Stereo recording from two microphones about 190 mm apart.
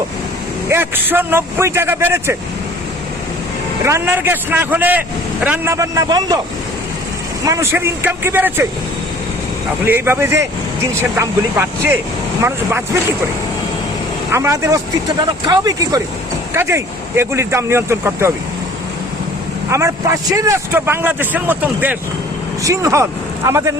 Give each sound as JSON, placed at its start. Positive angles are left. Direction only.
{"t": 0.7, "sound": "a man's voice", "side_deg": -10}
{"t": 3.8, "sound": "a man's voice", "side_deg": -15}
{"t": 7.4, "sound": "a man's voice", "side_deg": -15}
{"t": 9.8, "sound": "a man's voice", "side_deg": -10}
{"t": 14.3, "sound": "a man's voice", "side_deg": -15}
{"t": 19.7, "sound": "a man's voice", "side_deg": -15}